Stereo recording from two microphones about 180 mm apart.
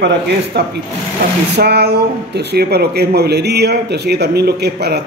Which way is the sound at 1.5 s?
65° right (ahead or behind).